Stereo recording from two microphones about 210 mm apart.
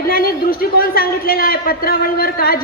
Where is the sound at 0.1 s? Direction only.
45° left (ahead or behind).